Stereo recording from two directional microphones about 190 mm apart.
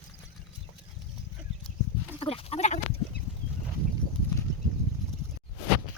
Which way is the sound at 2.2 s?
30° left (ahead or behind).